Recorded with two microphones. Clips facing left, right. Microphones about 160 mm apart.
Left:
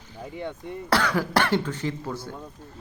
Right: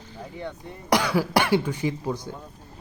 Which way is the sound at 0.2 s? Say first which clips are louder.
Left 2 dB; 20° left (ahead or behind).